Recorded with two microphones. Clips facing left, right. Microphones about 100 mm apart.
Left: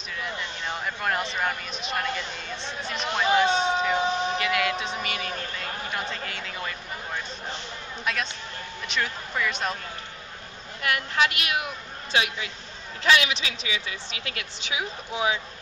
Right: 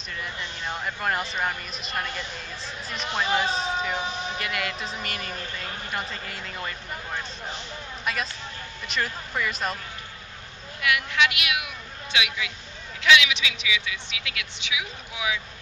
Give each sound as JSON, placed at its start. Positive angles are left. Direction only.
{"t": 0.2, "sound": "speech", "side_deg": 0}
{"t": 8.0, "sound": "speech", "side_deg": 0}
{"t": 10.8, "sound": "speech", "side_deg": 40}